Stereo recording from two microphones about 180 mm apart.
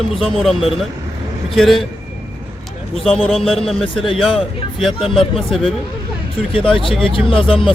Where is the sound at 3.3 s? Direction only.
Centre (ahead or behind).